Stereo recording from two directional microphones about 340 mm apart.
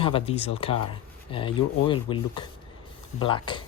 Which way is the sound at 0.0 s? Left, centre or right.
Centre.